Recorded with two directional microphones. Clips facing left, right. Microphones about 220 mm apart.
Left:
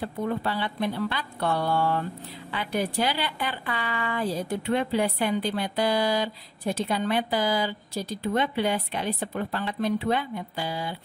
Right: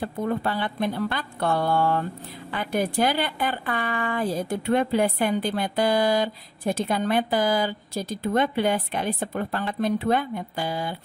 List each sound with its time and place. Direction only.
0.0 s a woman's voice: 50° right (ahead or behind)